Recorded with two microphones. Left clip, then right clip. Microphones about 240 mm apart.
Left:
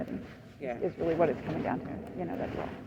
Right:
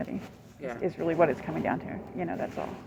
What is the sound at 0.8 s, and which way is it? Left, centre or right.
Speech, right.